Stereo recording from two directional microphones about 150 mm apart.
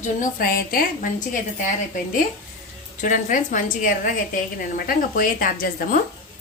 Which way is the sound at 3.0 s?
55° left (ahead or behind).